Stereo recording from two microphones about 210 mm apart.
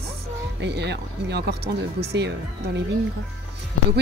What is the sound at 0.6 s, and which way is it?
Speech, 55° right (ahead or behind).